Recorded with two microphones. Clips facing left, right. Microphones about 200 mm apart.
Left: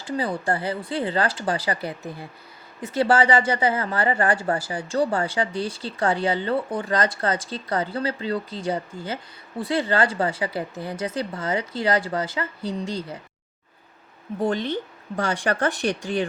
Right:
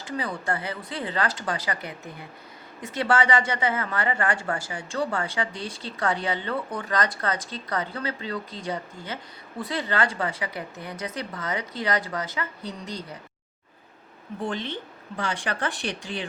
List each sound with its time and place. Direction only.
0.0 s speech: 30° left (ahead or behind)
2.9 s a woman's voice: 30° left (ahead or behind)
14.4 s speech: 40° left (ahead or behind)